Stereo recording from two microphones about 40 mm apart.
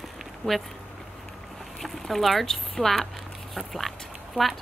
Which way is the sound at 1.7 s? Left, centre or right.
Centre.